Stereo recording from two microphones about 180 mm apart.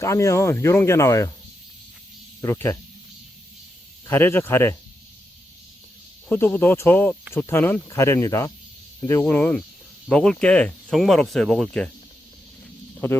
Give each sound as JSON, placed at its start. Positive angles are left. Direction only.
{"t": 0.0, "sound": "speech", "side_deg": 15}
{"t": 2.4, "sound": "speech", "side_deg": 15}
{"t": 4.0, "sound": "speech", "side_deg": 10}
{"t": 6.2, "sound": "speech", "side_deg": 10}
{"t": 13.0, "sound": "speech", "side_deg": 10}